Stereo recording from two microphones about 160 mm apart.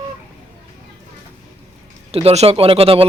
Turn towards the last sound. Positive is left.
turn(degrees=-35)  # may be behind; listen again after turning